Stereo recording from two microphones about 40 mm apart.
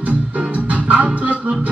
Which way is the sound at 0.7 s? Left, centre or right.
Right.